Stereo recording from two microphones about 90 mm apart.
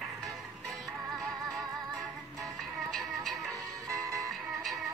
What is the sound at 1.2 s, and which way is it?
Music, centre (ahead or behind).